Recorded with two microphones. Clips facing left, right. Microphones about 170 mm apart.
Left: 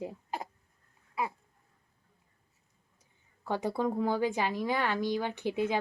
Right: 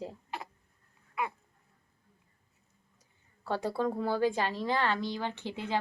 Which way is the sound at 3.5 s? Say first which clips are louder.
Even; 15° left (ahead or behind).